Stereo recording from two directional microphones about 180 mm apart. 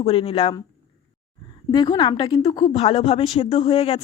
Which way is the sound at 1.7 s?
25° left (ahead or behind).